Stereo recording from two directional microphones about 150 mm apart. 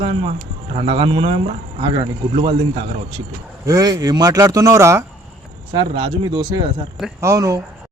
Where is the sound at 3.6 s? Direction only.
25° right (ahead or behind).